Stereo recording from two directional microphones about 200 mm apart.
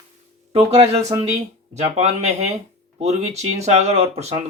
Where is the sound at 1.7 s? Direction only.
35° right (ahead or behind).